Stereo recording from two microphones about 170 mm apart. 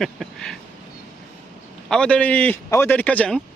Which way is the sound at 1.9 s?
5° left (ahead or behind).